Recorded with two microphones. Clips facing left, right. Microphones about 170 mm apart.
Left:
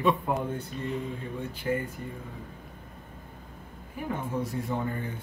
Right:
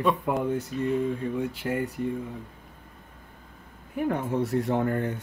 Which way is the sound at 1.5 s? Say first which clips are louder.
Right 1 dB; 75° right (ahead or behind).